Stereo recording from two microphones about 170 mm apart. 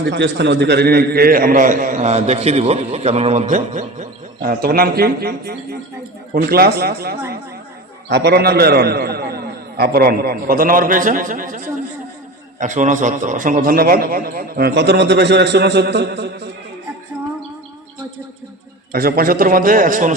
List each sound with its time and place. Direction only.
0.1 s a man's voice: 90° right
18.9 s a man's voice: 60° right (ahead or behind)